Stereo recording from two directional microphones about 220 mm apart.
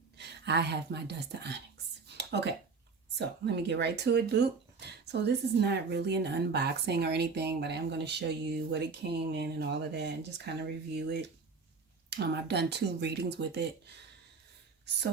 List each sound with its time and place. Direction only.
0.2 s speech: 50° right (ahead or behind)
2.0 s a sound: 50° right (ahead or behind)
3.2 s speech: 50° right (ahead or behind)